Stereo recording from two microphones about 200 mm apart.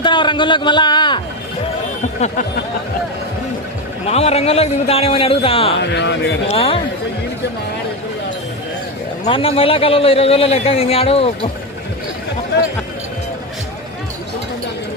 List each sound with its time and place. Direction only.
0.0 s a sound: 25° left (ahead or behind)
4.0 s a man's voice: 30° left (ahead or behind)
5.8 s music: 60° left (ahead or behind)
6.5 s a man's voice: 25° left (ahead or behind)
9.2 s a man's voice: 30° left (ahead or behind)